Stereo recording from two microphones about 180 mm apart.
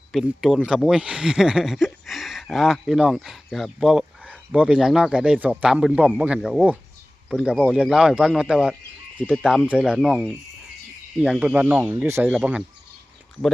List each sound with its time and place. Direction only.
0.1 s speech: centre (ahead or behind)